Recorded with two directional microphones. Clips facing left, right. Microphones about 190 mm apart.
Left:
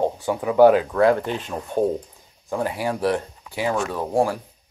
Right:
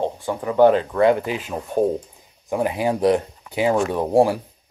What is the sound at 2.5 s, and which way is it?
Speech, 15° right (ahead or behind).